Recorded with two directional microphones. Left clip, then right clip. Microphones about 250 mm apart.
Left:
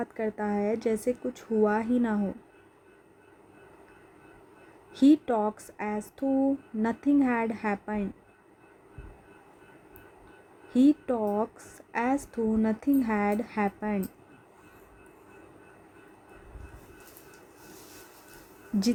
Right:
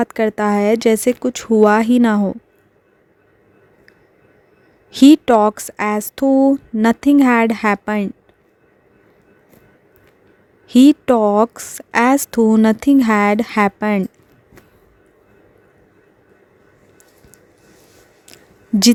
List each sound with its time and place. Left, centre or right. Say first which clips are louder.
0.0 s speech: right 15 dB; right
4.9 s speech: right 13 dB; right
10.7 s speech: right 13 dB; right